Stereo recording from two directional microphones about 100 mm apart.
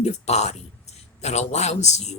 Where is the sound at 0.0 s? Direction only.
90° left.